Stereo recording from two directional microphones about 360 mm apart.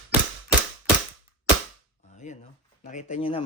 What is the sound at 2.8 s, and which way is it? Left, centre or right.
Speech, centre.